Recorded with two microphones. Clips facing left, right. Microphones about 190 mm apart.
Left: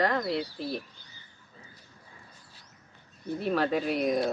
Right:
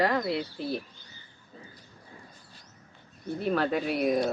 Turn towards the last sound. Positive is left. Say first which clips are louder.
# right 1 dB
turn(degrees=-5)  # may be behind; listen again after turning